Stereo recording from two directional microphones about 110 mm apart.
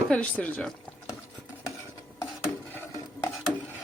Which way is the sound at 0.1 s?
10° left (ahead or behind).